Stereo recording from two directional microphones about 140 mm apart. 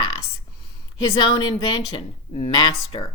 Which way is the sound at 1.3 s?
30° left (ahead or behind).